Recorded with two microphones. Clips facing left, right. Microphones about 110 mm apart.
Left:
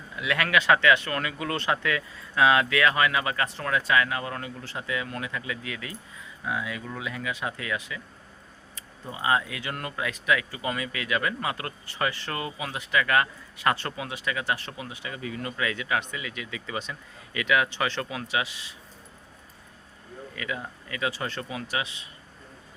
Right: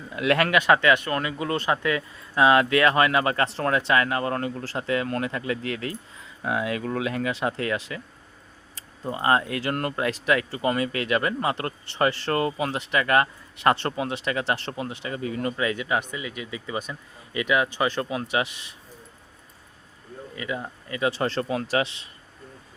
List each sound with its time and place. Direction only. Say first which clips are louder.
0.2 s speech: right 4 dB; 40° right (ahead or behind)
6.4 s speech: right 5 dB; 60° right (ahead or behind)
7.4 s speech: right 5 dB; 45° right (ahead or behind)
9.0 s speech: right 4 dB; 50° right (ahead or behind); by 18.4 s 30° right (ahead or behind)
20.3 s speech: right 3 dB; 30° right (ahead or behind)
21.4 s speech: right 8 dB; 45° right (ahead or behind)